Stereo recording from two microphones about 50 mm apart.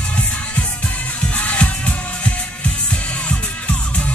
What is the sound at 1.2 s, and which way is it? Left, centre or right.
Music, left.